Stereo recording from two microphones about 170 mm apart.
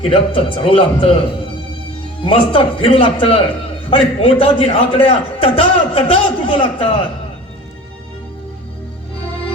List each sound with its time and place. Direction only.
0.1 s a man's voice: 35° left (ahead or behind)
2.2 s a man's voice: 35° left (ahead or behind)